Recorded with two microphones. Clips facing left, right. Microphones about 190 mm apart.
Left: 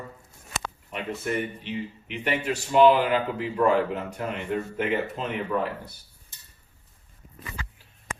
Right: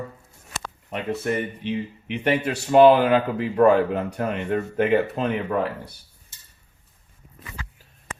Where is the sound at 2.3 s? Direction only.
60° right (ahead or behind).